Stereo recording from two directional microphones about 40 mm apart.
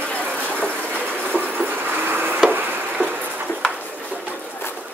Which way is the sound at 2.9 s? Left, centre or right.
Right.